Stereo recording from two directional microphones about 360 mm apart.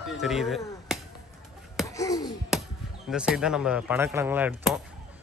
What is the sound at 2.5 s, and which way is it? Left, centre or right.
Chop, centre.